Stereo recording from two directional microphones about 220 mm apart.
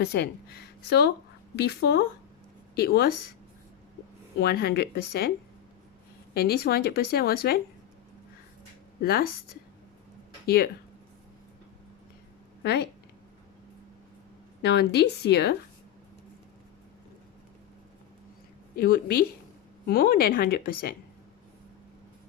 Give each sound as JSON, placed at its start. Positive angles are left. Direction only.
{"t": 0.0, "sound": "speech", "side_deg": 50}
{"t": 4.4, "sound": "speech", "side_deg": 45}
{"t": 6.3, "sound": "speech", "side_deg": 45}
{"t": 9.0, "sound": "a woman's voice", "side_deg": 45}
{"t": 10.4, "sound": "speech", "side_deg": 45}
{"t": 12.6, "sound": "speech", "side_deg": 50}
{"t": 14.6, "sound": "speech", "side_deg": 50}
{"t": 18.8, "sound": "a woman's voice", "side_deg": 40}